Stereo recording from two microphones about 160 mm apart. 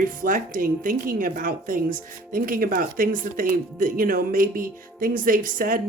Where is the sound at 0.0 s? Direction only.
60° right (ahead or behind).